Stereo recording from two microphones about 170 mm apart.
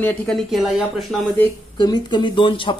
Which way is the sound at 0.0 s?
5° left (ahead or behind).